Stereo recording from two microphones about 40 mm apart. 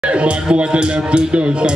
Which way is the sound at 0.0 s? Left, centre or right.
Right.